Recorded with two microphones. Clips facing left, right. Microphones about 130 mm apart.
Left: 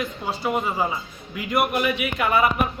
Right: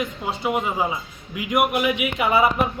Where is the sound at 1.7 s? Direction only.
15° right (ahead or behind).